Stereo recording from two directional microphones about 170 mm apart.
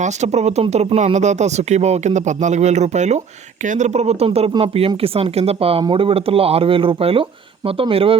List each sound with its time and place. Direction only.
0.0 s speech: 40° right (ahead or behind)